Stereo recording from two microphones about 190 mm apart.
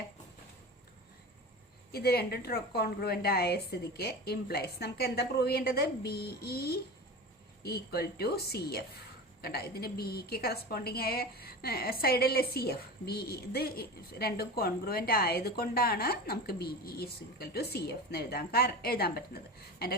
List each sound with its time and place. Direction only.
1.9 s a woman's voice: 55° left (ahead or behind)